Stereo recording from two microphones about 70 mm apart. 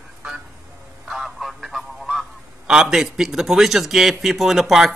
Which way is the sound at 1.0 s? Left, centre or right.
Centre.